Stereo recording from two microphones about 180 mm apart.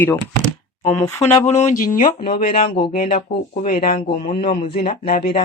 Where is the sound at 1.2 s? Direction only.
40° left (ahead or behind).